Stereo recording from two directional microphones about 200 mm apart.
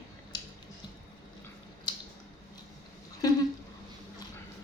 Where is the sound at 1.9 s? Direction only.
20° left (ahead or behind).